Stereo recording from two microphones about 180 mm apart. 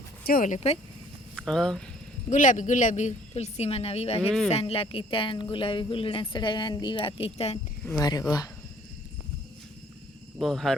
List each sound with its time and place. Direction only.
0.3 s speech: 50° left (ahead or behind)
1.4 s speech: 5° left (ahead or behind)
2.3 s speech: 45° left (ahead or behind)
7.9 s speech: 20° left (ahead or behind)
10.4 s speech: centre (ahead or behind)